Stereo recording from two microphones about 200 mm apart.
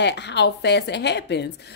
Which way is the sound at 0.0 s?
60° left (ahead or behind).